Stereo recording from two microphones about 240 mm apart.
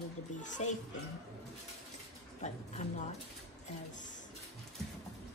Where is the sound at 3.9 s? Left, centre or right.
Left.